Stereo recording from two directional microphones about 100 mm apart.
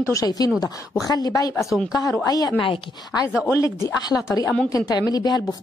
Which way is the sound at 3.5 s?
30° left (ahead or behind).